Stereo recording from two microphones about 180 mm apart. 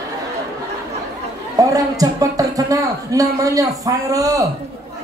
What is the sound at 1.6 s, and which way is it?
A man's voice, 20° right (ahead or behind).